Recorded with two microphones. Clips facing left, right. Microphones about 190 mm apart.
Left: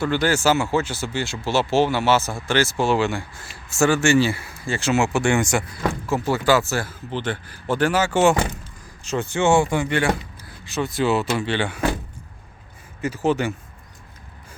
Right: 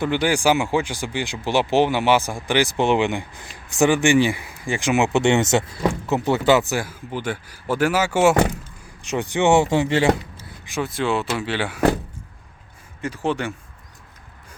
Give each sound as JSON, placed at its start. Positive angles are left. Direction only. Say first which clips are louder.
{"t": 0.0, "sound": "speech", "louder": "even", "side_deg": -15}
{"t": 10.8, "sound": "speech", "louder": "left 3 dB", "side_deg": 0}
{"t": 13.0, "sound": "speech", "louder": "left 3 dB", "side_deg": 5}